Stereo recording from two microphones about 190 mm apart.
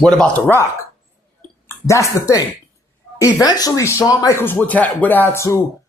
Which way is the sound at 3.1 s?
15° left (ahead or behind).